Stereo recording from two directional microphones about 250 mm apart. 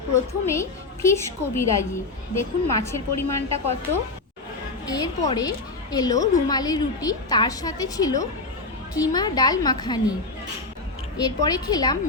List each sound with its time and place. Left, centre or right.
0.4 s a woman's voice: centre
4.9 s a woman's voice: centre
11.2 s a woman's voice: centre